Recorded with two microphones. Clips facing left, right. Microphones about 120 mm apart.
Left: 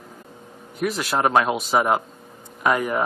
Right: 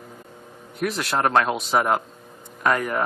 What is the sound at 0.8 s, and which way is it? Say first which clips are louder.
Speech: left 1 dB; centre (ahead or behind).